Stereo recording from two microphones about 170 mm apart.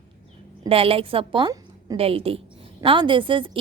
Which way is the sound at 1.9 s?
35° right (ahead or behind).